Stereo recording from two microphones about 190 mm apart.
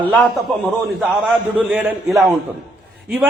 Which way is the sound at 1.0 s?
Centre (ahead or behind).